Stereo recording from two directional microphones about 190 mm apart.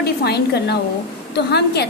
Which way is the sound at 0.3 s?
60° left (ahead or behind).